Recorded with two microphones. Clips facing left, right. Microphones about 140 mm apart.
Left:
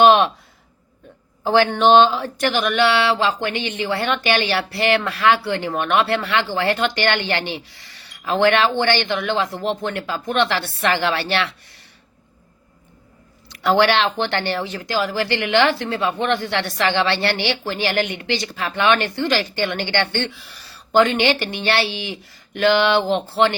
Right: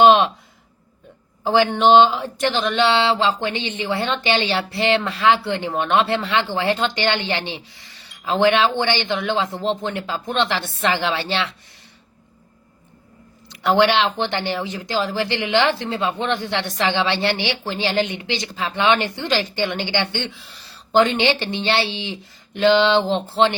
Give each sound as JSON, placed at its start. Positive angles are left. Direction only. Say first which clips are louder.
{"t": 0.0, "sound": "a sound", "louder": "even", "side_deg": -20}
{"t": 1.5, "sound": "speech", "louder": "even", "side_deg": -15}
{"t": 13.5, "sound": "speech", "louder": "even", "side_deg": -20}